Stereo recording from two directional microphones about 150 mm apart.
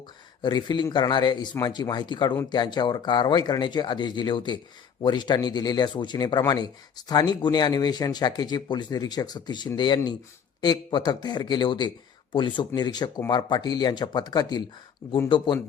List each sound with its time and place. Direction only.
0.4 s a man's voice: 30° left (ahead or behind)
15.0 s speech: 15° left (ahead or behind)